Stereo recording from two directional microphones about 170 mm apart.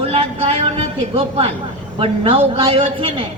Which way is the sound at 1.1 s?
35° right (ahead or behind).